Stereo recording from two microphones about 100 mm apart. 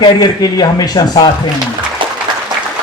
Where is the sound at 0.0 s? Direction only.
45° left (ahead or behind).